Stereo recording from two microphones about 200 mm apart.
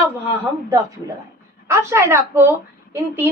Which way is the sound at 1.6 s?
15° right (ahead or behind).